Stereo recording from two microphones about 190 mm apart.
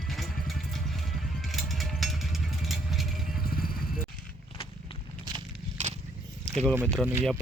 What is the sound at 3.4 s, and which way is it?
Vehicle, 50° left (ahead or behind).